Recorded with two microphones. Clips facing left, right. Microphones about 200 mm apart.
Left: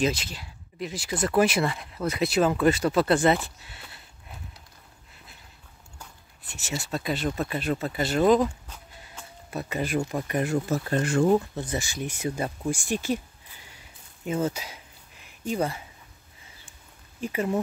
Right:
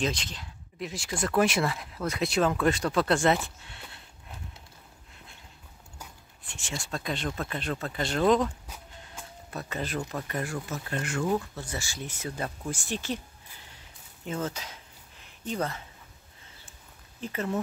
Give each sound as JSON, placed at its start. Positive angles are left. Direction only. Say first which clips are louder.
{"t": 0.0, "sound": "speech", "louder": "left 4 dB", "side_deg": 5}
{"t": 6.4, "sound": "speech", "louder": "left 4 dB", "side_deg": 5}
{"t": 10.7, "sound": "speech", "louder": "left 8 dB", "side_deg": 35}
{"t": 11.5, "sound": "speech", "louder": "left 6 dB", "side_deg": 20}
{"t": 13.7, "sound": "a sound", "louder": "left 1 dB", "side_deg": 10}
{"t": 15.4, "sound": "speech", "louder": "left 4 dB", "side_deg": 10}
{"t": 17.2, "sound": "speech", "louder": "left 4 dB", "side_deg": 10}